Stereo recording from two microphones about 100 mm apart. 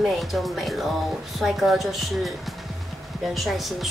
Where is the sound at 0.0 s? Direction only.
Centre (ahead or behind).